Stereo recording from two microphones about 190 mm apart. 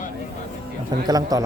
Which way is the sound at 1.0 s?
20° right (ahead or behind).